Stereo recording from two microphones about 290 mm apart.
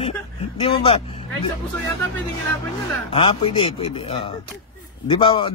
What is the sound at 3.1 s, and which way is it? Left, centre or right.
Speech, centre.